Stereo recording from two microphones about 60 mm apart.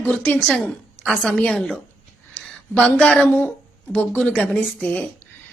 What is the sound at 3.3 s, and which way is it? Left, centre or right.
Speech, left.